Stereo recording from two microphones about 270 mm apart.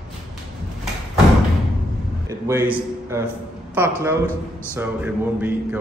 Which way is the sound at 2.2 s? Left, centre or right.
Centre.